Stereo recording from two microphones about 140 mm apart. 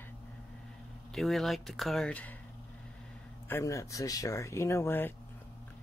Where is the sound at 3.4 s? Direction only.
20° left (ahead or behind).